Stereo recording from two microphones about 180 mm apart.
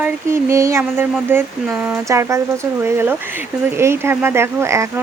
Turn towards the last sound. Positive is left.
turn(degrees=-15)  # may be behind; listen again after turning